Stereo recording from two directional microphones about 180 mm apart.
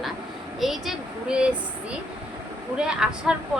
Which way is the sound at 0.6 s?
Centre (ahead or behind).